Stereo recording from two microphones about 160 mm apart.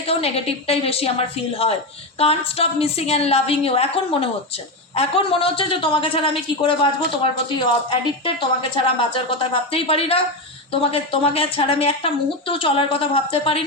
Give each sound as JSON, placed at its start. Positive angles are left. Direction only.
{"t": 0.1, "sound": "a woman's voice", "side_deg": 40}